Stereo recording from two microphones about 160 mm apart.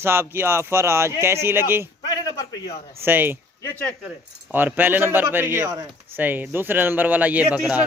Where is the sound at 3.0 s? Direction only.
15° right (ahead or behind).